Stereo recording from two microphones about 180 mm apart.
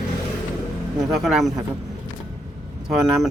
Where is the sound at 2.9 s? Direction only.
Centre (ahead or behind).